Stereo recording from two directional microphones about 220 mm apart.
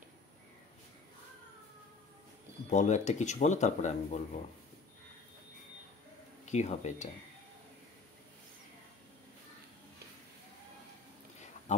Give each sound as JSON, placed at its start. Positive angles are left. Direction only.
{"t": 2.7, "sound": "speech", "side_deg": 30}
{"t": 6.4, "sound": "speech", "side_deg": 30}